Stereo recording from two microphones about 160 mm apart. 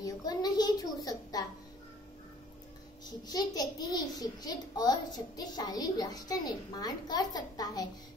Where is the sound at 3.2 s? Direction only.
25° left (ahead or behind).